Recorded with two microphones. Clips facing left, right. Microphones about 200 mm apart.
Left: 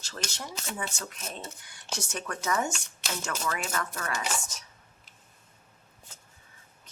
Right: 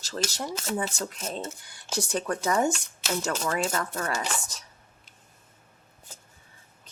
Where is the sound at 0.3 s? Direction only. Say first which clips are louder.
Right 7 dB; 35° right (ahead or behind).